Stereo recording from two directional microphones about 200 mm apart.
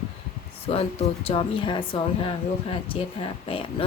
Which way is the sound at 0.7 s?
30° left (ahead or behind).